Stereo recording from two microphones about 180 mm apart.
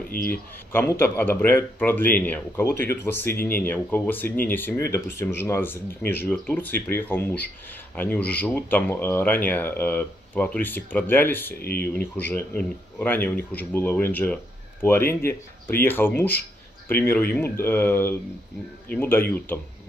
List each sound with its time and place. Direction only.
0.3 s speech: 10° left (ahead or behind)
11.6 s speech: 60° left (ahead or behind)
11.9 s speech: 10° left (ahead or behind)